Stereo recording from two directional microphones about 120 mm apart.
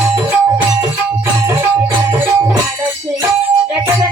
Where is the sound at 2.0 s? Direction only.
25° right (ahead or behind).